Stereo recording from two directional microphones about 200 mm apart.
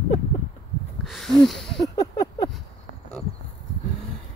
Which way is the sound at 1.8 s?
20° left (ahead or behind).